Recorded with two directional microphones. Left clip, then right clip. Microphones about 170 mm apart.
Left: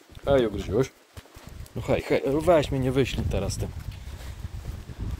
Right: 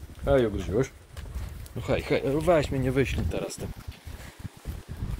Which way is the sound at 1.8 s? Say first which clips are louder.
Left 2 dB; 30° left (ahead or behind).